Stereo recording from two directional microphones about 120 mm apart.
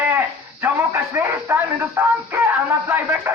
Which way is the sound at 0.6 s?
20° right (ahead or behind).